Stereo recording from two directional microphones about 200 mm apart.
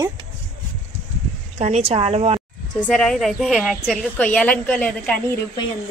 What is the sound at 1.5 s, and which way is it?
Speech, 35° right (ahead or behind).